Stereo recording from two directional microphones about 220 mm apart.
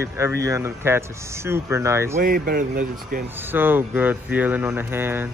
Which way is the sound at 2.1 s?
40° right (ahead or behind).